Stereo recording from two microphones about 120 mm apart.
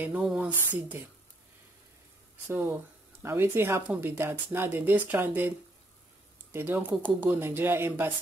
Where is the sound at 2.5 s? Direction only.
20° right (ahead or behind).